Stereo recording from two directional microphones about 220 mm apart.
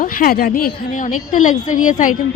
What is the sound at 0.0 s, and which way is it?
Speech, 40° left (ahead or behind).